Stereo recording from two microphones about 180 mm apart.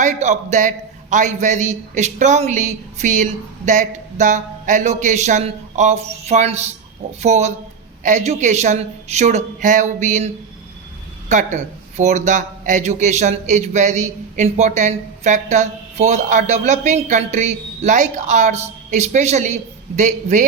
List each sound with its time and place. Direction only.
0.0 s a man's voice: 40° right (ahead or behind)